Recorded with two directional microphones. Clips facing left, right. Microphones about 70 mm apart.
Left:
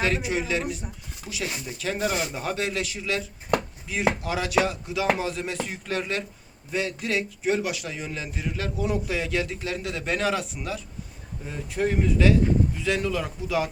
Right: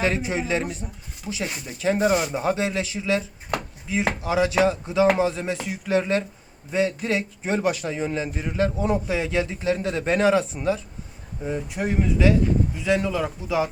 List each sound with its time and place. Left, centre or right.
0.0 s a man's voice: right
5.6 s speech: centre
5.9 s a man's voice: right
11.4 s a man's voice: centre